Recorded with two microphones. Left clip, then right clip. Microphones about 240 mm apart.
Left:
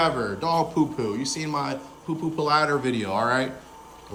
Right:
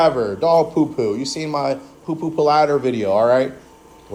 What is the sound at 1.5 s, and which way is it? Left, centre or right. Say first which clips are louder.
Speech: right 8 dB; left.